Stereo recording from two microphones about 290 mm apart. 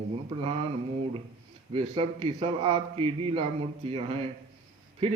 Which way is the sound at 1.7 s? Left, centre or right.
Centre.